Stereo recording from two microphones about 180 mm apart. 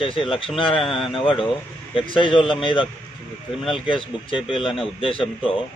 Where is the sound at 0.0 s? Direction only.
30° left (ahead or behind).